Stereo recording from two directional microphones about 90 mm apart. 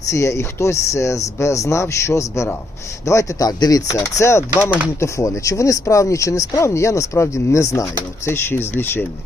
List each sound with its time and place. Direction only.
0.0 s speech: 35° left (ahead or behind)
8.3 s speech: 25° left (ahead or behind)